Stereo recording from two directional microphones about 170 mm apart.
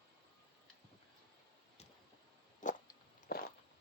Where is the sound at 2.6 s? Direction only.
50° left (ahead or behind).